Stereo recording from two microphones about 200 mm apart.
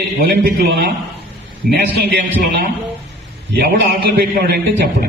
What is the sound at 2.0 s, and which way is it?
A man's voice, 50° right (ahead or behind).